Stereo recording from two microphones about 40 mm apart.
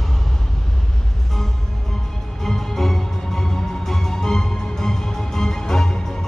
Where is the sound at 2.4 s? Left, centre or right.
Centre.